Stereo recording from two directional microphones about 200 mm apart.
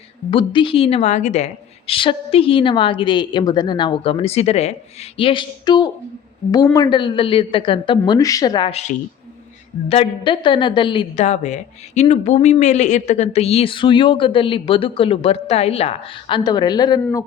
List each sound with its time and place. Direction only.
0.3 s a woman's voice: 25° left (ahead or behind)